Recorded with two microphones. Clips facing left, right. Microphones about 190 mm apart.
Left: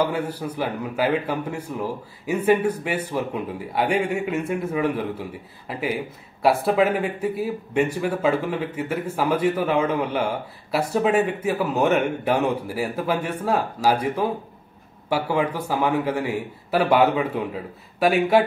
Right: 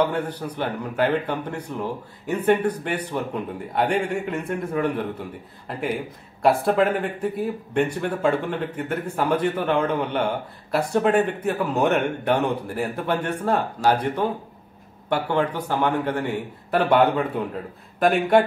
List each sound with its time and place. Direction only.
0.0 s a man's voice: 5° left (ahead or behind)